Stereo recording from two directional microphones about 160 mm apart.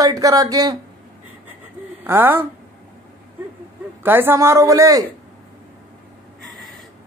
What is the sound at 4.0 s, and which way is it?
A man's voice, 15° right (ahead or behind).